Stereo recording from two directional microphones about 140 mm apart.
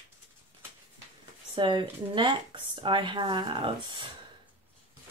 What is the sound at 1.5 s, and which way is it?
Speech, 35° right (ahead or behind).